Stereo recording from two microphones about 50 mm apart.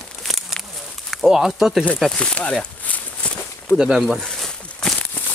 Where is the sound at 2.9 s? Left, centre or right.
Left.